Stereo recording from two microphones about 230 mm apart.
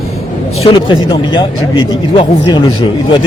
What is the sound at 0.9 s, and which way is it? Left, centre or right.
Speech, left.